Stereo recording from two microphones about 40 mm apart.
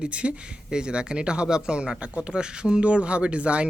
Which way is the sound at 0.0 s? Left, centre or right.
Right.